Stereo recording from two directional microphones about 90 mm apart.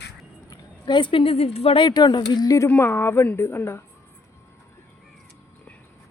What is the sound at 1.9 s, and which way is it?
Speech, 55° left (ahead or behind).